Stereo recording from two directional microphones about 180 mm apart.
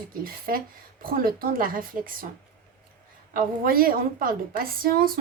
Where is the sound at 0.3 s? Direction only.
55° right (ahead or behind).